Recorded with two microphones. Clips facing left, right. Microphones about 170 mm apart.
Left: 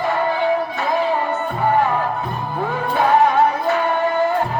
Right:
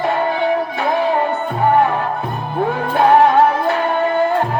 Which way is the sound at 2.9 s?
65° right (ahead or behind).